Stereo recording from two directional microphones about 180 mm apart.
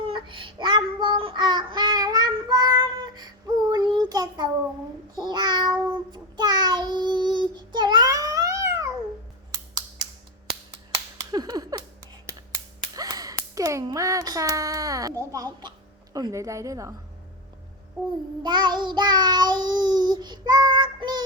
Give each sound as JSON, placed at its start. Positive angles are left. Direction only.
{"t": 0.0, "sound": "child singing", "side_deg": -30}
{"t": 11.2, "sound": "a sound", "side_deg": -25}
{"t": 13.0, "sound": "a woman's voice", "side_deg": -20}
{"t": 18.4, "sound": "child singing", "side_deg": -25}